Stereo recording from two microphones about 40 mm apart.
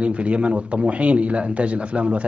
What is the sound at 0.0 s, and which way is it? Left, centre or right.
Speech, right.